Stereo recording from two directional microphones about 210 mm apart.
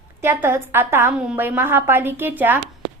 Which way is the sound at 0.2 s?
10° right (ahead or behind).